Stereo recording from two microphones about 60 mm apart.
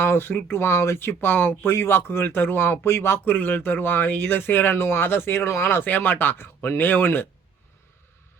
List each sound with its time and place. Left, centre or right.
0.0 s speech: left
0.5 s speech: left
3.2 s speech: left